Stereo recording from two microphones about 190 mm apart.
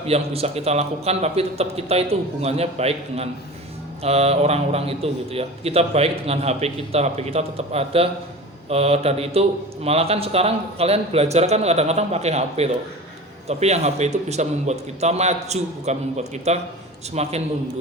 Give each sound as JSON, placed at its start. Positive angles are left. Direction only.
{"t": 0.1, "sound": "a man's voice", "side_deg": -35}